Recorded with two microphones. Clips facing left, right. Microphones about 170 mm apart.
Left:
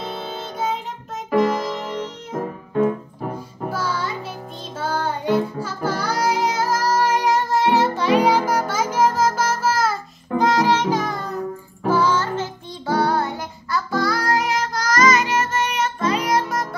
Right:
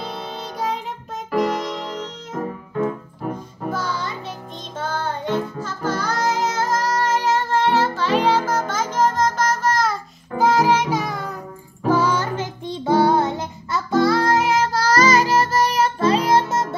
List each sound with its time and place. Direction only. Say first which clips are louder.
0.0 s music: left 1 dB; centre (ahead or behind)
3.7 s music: left 2 dB; 5° left (ahead or behind); by 16.6 s 25° right (ahead or behind)